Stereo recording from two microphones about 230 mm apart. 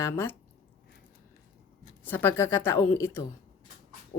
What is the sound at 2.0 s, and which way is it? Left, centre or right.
A woman's voice, centre.